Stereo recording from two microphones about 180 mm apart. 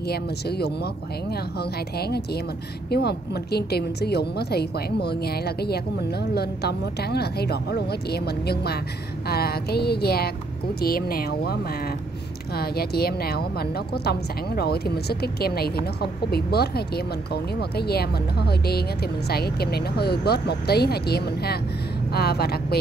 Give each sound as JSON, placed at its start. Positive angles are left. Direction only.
{"t": 0.1, "sound": "a woman's voice", "side_deg": 65}